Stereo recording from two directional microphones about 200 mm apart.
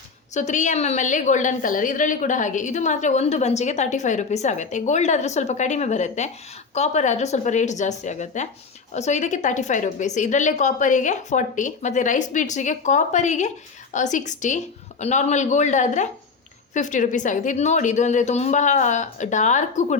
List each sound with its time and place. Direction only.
0.3 s a woman's voice: 35° left (ahead or behind)